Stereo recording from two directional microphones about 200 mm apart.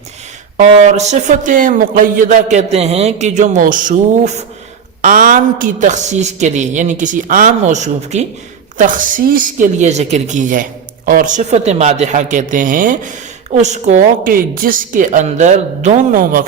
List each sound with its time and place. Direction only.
0.5 s speech: 35° right (ahead or behind)